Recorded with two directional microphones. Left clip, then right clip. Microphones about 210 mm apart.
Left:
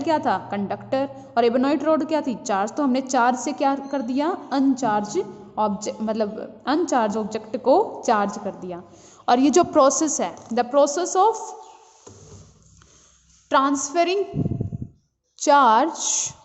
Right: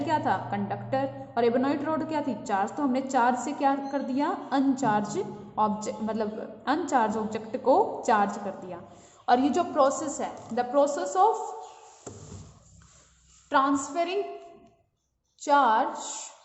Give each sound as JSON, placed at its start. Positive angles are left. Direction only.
{"t": 0.0, "sound": "a woman's voice", "side_deg": 40}
{"t": 13.5, "sound": "a woman's voice", "side_deg": 45}
{"t": 15.4, "sound": "a woman's voice", "side_deg": 50}